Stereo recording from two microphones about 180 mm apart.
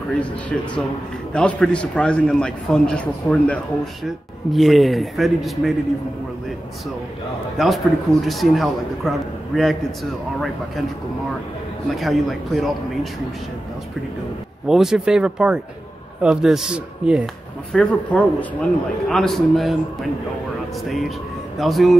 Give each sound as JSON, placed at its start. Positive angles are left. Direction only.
{"t": 0.2, "sound": "a man's voice", "side_deg": 5}
{"t": 7.5, "sound": "a man's voice", "side_deg": 0}
{"t": 12.0, "sound": "a man's voice", "side_deg": 0}
{"t": 14.7, "sound": "a man's voice", "side_deg": -5}
{"t": 17.7, "sound": "a man's voice", "side_deg": 5}
{"t": 21.5, "sound": "a man's voice", "side_deg": 0}